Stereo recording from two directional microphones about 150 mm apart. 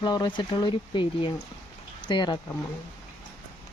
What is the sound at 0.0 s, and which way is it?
Speech, 30° left (ahead or behind).